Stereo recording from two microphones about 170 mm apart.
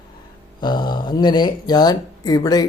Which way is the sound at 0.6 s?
25° left (ahead or behind).